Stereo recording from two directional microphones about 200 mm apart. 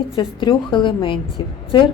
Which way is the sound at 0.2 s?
25° left (ahead or behind).